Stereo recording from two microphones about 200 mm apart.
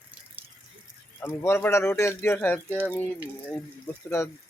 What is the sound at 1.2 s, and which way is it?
Speech, 10° left (ahead or behind).